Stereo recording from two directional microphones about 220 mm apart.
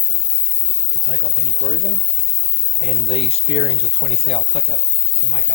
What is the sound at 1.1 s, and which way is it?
Speech, 40° left (ahead or behind).